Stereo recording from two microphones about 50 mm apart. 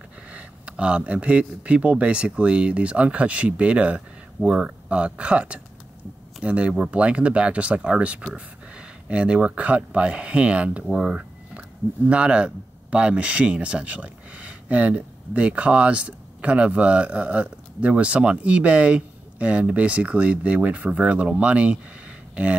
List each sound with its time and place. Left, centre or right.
0.3 s speech: right
4.4 s speech: centre
4.8 s speech: right
11.0 s a sound: right
12.1 s speech: right